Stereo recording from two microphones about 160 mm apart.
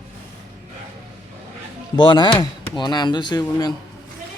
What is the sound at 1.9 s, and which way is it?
Speech, 30° left (ahead or behind).